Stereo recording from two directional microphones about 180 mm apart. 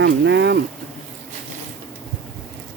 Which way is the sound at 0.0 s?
75° right (ahead or behind).